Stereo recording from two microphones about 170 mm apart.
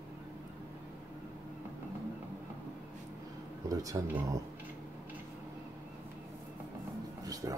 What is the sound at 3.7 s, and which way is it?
Speech, 20° right (ahead or behind).